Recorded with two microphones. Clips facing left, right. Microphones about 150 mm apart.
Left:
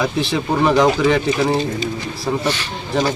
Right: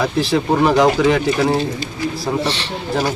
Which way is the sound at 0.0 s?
Centre (ahead or behind).